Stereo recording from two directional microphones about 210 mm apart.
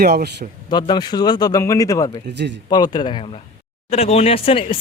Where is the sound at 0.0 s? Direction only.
50° right (ahead or behind).